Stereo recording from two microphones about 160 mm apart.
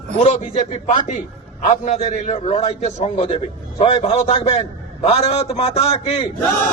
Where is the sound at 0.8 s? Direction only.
50° left (ahead or behind).